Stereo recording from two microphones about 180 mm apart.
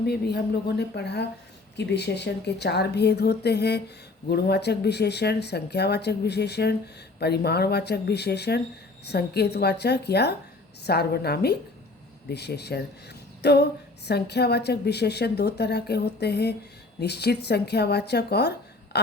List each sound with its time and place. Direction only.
0.0 s a woman's voice: 60° left (ahead or behind)